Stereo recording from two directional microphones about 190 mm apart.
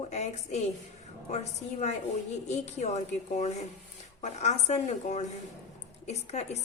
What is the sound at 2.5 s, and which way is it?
A woman's voice, 35° left (ahead or behind).